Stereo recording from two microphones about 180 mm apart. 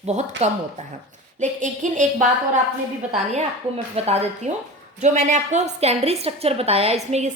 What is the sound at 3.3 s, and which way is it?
A woman's voice, 35° right (ahead or behind).